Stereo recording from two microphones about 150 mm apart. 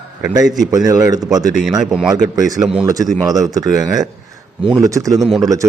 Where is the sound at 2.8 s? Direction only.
25° right (ahead or behind).